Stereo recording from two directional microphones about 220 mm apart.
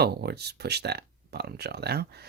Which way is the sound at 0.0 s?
45° right (ahead or behind).